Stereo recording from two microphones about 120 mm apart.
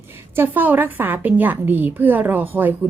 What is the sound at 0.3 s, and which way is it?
A woman's voice, 15° right (ahead or behind).